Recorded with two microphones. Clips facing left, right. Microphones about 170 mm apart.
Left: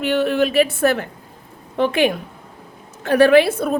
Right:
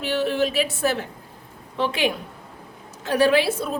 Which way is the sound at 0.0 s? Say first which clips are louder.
Left 5 dB; 60° left (ahead or behind).